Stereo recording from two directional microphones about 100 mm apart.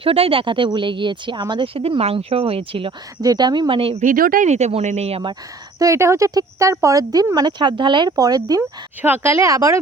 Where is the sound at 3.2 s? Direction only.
45° right (ahead or behind); by 4.0 s 65° right (ahead or behind).